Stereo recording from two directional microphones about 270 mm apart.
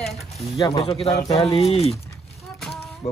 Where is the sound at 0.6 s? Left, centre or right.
Centre.